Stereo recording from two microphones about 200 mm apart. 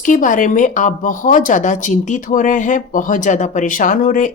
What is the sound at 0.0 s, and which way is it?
Speech, 40° left (ahead or behind).